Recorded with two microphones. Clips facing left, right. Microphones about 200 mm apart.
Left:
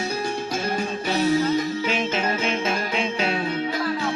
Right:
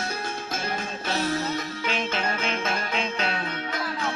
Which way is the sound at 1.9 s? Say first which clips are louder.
Left 4 dB; 10° left (ahead or behind).